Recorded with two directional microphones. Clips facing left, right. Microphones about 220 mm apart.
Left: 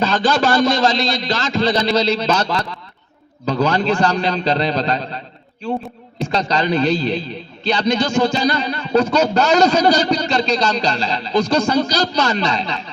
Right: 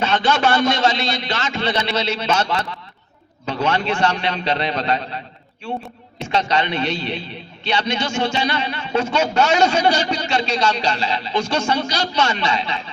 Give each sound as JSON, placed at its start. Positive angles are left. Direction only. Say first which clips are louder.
{"t": 0.0, "sound": "a man's voice", "louder": "left 2 dB", "side_deg": 35}
{"t": 6.2, "sound": "a man's voice", "louder": "left 2 dB", "side_deg": 35}